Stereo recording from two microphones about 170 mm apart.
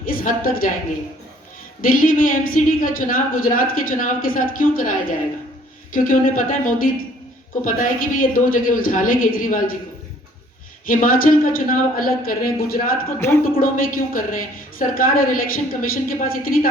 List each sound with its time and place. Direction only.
0.0 s a woman's voice: 55° left (ahead or behind)
1.8 s a woman's voice: 55° left (ahead or behind)
10.8 s a woman's voice: 55° left (ahead or behind)
13.1 s a woman's voice: 15° left (ahead or behind)
13.6 s a woman's voice: 55° left (ahead or behind)